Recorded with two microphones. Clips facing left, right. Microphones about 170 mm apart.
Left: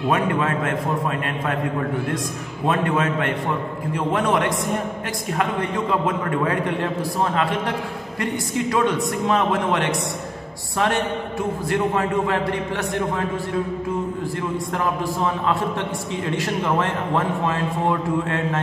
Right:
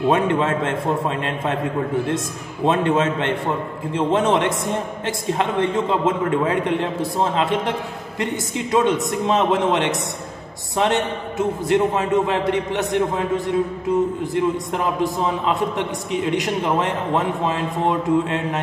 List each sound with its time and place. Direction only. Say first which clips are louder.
0.1 s a man's voice: right 1 dB; 25° right (ahead or behind)
14.3 s a man's voice: right 4 dB; 20° right (ahead or behind)